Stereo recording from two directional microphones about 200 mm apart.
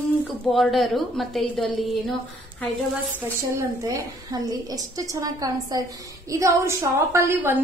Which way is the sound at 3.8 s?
15° right (ahead or behind).